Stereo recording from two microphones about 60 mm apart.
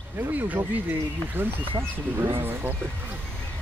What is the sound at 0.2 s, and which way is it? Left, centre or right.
Speech, right.